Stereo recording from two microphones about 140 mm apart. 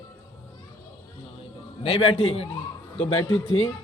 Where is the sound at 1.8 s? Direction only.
45° left (ahead or behind).